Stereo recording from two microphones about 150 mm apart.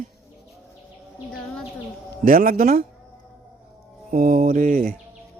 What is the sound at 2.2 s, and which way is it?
Speech, 70° right (ahead or behind).